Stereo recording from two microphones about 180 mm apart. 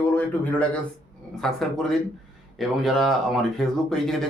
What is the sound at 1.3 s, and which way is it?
Speech, centre (ahead or behind).